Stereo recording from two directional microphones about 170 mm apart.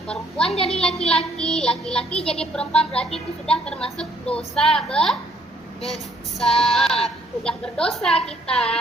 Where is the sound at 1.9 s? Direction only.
35° left (ahead or behind).